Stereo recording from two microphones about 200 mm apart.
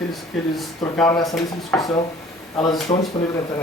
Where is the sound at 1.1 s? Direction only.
15° left (ahead or behind).